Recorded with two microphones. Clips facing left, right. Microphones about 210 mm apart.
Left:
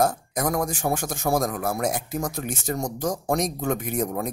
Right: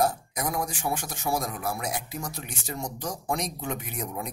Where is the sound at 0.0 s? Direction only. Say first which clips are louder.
Left 4 dB; 45° left (ahead or behind).